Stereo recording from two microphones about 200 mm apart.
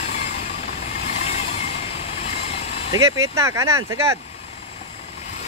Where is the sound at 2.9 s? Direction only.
15° right (ahead or behind).